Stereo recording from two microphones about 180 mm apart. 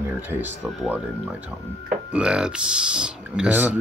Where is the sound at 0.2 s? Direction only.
10° right (ahead or behind).